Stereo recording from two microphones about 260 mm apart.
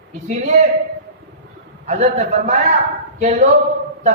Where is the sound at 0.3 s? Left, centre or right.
Right.